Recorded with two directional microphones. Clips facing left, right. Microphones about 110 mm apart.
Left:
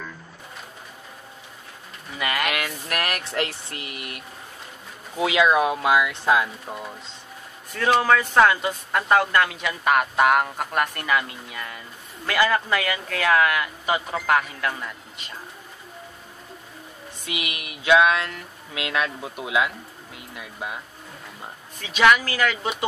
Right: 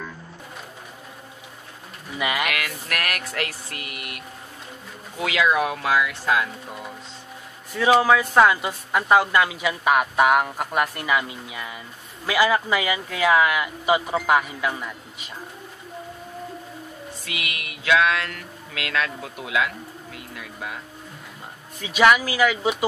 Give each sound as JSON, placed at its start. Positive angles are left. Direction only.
{"t": 2.1, "sound": "speech", "side_deg": -5}
{"t": 2.5, "sound": "speech", "side_deg": 25}
{"t": 5.2, "sound": "speech", "side_deg": 20}
{"t": 7.7, "sound": "speech", "side_deg": -5}
{"t": 17.2, "sound": "speech", "side_deg": 20}
{"t": 21.7, "sound": "speech", "side_deg": -5}